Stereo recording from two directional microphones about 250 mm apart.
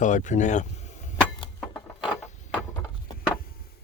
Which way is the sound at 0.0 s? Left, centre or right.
Left.